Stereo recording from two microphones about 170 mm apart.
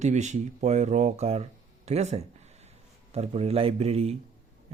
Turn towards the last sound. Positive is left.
turn(degrees=-35)  # may be behind; listen again after turning